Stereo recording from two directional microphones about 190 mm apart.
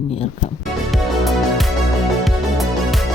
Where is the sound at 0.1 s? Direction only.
30° left (ahead or behind).